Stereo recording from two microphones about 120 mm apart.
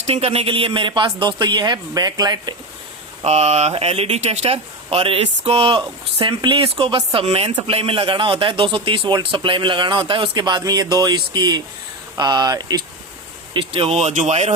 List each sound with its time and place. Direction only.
0.0 s speech: 60° right (ahead or behind); by 2.6 s 35° right (ahead or behind)
3.2 s speech: 65° right (ahead or behind); by 12.8 s 30° right (ahead or behind)
13.5 s speech: 50° right (ahead or behind); by 14.5 s 65° right (ahead or behind)